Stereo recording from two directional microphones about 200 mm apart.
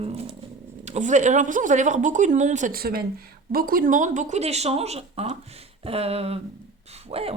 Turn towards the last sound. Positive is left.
turn(degrees=-30)  # may be behind; listen again after turning